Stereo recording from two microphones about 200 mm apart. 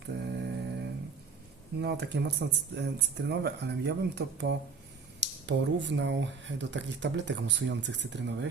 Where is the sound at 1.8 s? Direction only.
55° right (ahead or behind).